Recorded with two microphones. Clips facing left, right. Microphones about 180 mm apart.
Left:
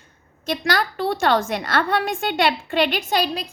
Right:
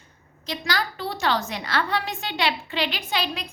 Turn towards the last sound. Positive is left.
turn(degrees=40)  # may be behind; listen again after turning